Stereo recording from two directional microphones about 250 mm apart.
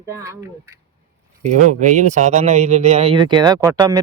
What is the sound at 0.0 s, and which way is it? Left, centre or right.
Speech, centre.